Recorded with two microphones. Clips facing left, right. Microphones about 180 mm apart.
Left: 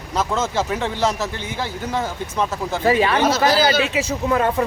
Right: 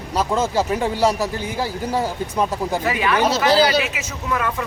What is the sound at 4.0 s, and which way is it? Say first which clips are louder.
Speech: left 6 dB; 30° left (ahead or behind).